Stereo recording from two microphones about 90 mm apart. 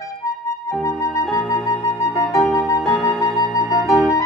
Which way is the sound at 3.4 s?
40° left (ahead or behind).